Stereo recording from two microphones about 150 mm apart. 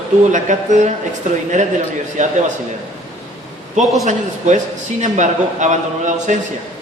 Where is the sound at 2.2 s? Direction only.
55° right (ahead or behind).